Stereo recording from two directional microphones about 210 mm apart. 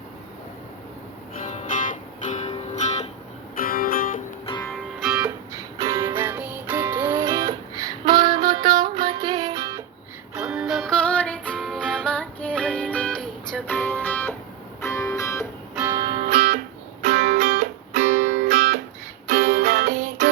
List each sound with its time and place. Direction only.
2.3 s music: 30° left (ahead or behind)
3.6 s music: 45° left (ahead or behind)
4.6 s music: centre (ahead or behind)
5.5 s music: 15° right (ahead or behind)
10.3 s music: 5° right (ahead or behind); by 15.4 s 15° left (ahead or behind)
15.9 s music: 20° right (ahead or behind)
17.0 s music: 40° right (ahead or behind)